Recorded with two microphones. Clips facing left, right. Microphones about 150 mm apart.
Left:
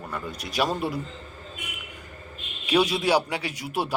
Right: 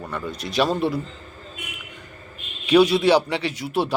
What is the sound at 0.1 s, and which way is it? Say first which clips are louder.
Speech: right 4 dB; 10° left (ahead or behind).